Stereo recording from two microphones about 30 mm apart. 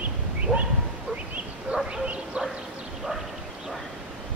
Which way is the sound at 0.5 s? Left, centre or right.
Right.